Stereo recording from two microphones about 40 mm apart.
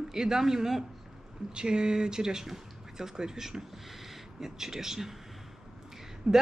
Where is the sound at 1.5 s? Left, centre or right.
Right.